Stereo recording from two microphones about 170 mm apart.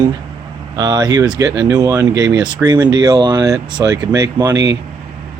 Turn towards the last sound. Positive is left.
turn(degrees=-20)  # may be behind; listen again after turning